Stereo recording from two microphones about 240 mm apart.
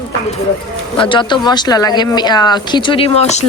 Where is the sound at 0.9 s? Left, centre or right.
Left.